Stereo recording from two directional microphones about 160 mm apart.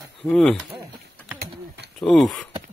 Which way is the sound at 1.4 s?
90° right.